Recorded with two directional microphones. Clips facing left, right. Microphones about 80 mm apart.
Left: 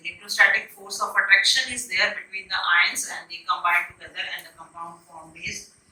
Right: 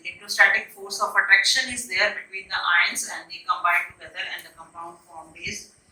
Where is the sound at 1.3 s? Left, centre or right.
Centre.